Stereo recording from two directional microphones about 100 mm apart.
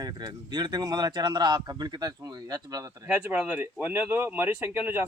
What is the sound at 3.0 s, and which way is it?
Speech, 15° right (ahead or behind).